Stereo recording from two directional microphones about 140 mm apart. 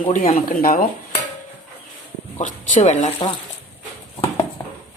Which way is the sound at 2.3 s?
65° left (ahead or behind).